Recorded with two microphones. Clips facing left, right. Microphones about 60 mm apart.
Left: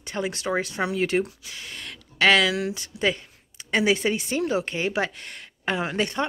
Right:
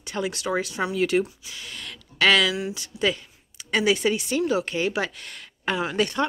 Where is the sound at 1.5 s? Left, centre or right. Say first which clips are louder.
Even; left.